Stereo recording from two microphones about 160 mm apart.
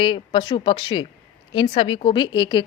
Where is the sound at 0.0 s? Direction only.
35° left (ahead or behind).